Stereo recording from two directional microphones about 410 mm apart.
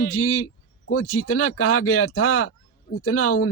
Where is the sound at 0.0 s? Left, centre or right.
Left.